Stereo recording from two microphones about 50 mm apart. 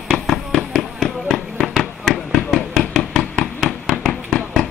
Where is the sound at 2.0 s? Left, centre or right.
Centre.